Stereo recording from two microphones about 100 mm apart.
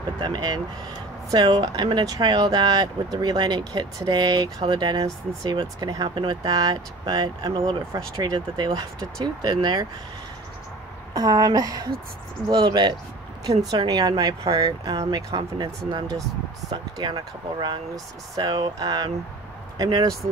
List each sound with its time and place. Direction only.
0.2 s speech: 50° right (ahead or behind)
6.0 s speech: 60° right (ahead or behind)
6.4 s speech: 40° right (ahead or behind)
11.1 s speech: 40° right (ahead or behind)
16.7 s speech: 55° right (ahead or behind); by 20.2 s 40° right (ahead or behind)